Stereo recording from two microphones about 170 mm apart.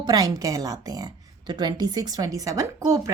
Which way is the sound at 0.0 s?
25° right (ahead or behind).